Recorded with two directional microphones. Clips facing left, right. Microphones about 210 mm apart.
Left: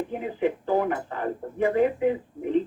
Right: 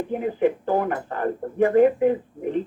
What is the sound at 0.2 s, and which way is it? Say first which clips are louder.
Speech: right 5 dB; 50° right (ahead or behind).